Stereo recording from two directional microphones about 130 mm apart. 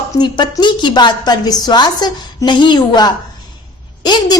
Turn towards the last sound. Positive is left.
turn(degrees=35)  # may be behind; listen again after turning